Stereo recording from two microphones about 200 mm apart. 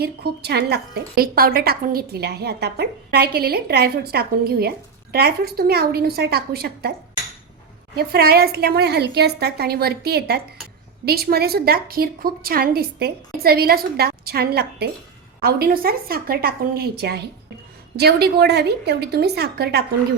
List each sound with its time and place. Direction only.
0.0 s a woman's voice: 55° right (ahead or behind)
7.9 s a woman's voice: 50° right (ahead or behind)